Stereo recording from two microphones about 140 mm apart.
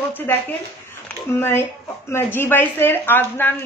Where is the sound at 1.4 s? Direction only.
15° left (ahead or behind).